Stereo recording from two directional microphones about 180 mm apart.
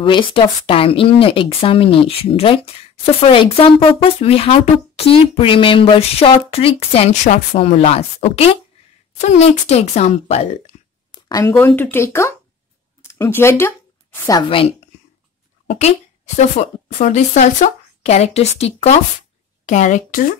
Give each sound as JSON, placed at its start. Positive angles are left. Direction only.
{"t": 0.0, "sound": "speech", "side_deg": 30}
{"t": 11.2, "sound": "speech", "side_deg": 20}
{"t": 15.6, "sound": "a sound", "side_deg": 35}
{"t": 16.3, "sound": "speech", "side_deg": 40}